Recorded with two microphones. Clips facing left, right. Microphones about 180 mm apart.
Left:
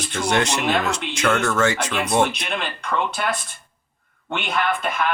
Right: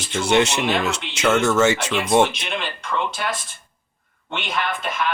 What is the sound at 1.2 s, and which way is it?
Speech, 10° right (ahead or behind).